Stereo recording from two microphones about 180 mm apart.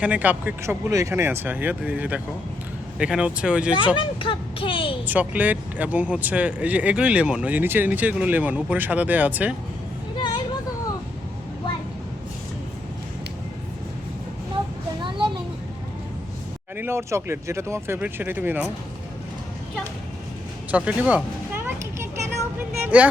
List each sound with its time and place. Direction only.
0.0 s speech: 10° right (ahead or behind)
3.9 s speech: 30° left (ahead or behind)
5.0 s speech: 10° right (ahead or behind)
10.2 s a sound: 25° left (ahead or behind)
16.7 s speech: 15° right (ahead or behind)
20.7 s a sound: 5° right (ahead or behind)
22.8 s vehicle: 10° right (ahead or behind)